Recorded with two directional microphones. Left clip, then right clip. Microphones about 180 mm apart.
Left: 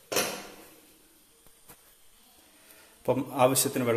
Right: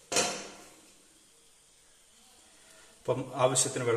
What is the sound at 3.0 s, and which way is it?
Speech, 40° left (ahead or behind).